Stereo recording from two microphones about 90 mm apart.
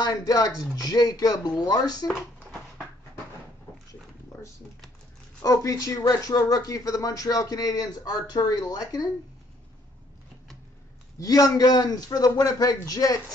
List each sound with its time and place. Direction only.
0.0 s speech: 45° left (ahead or behind)
5.4 s speech: 40° left (ahead or behind)
11.1 s speech: 40° left (ahead or behind)